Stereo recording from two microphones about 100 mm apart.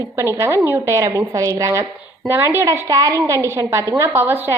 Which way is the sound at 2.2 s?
20° right (ahead or behind).